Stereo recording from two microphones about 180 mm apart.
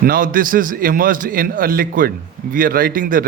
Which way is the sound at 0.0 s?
50° right (ahead or behind).